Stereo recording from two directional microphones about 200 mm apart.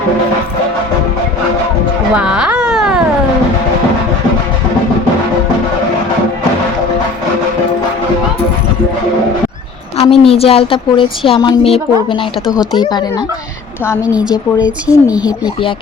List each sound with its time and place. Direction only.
2.1 s baby cry: 5° right (ahead or behind)
10.0 s a woman's voice: 30° left (ahead or behind)
14.0 s speech: 5° right (ahead or behind)
14.8 s speech: 15° left (ahead or behind)